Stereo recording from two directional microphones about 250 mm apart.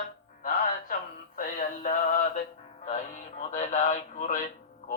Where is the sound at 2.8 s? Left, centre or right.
Left.